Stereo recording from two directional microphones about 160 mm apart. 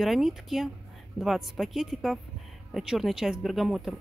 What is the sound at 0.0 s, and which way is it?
A woman's voice, centre (ahead or behind).